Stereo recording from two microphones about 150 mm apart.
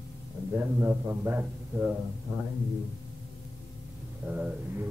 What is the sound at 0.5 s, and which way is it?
A man's voice, 15° right (ahead or behind).